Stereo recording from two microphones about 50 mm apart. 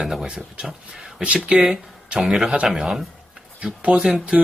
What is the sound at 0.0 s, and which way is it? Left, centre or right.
Speech, centre.